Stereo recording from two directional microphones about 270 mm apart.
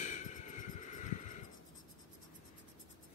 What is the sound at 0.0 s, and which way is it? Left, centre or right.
Music, left.